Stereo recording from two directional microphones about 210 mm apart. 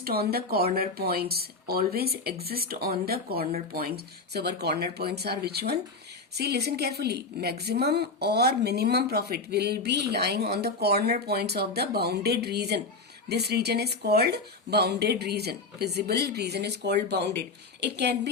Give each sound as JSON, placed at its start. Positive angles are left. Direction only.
{"t": 0.0, "sound": "a woman's voice", "side_deg": -45}